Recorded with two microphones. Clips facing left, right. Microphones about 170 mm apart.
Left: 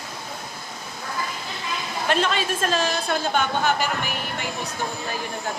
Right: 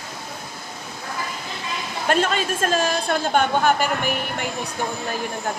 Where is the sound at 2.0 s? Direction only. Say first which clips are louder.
Right 2 dB; 45° right (ahead or behind).